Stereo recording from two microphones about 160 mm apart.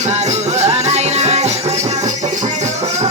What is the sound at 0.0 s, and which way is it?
Music, 45° right (ahead or behind).